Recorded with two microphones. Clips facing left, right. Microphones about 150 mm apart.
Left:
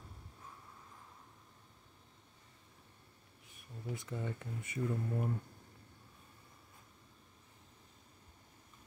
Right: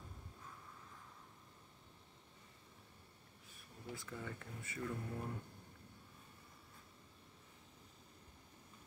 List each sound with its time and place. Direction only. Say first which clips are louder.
3.4 s speech: left 6 dB; 20° left (ahead or behind)